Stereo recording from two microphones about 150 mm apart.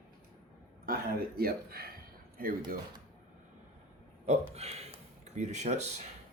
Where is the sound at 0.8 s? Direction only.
75° right (ahead or behind).